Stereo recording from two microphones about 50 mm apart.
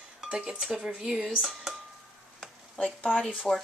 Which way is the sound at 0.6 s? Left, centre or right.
Centre.